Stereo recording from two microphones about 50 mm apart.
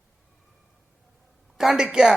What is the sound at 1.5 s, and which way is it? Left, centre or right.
Speech, centre.